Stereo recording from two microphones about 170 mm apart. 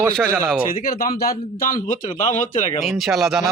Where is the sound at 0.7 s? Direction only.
60° left (ahead or behind).